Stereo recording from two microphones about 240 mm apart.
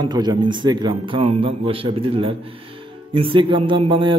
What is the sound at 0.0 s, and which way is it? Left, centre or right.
A man's voice, centre.